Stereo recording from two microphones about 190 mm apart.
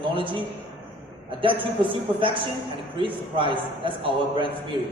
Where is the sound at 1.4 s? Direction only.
25° right (ahead or behind).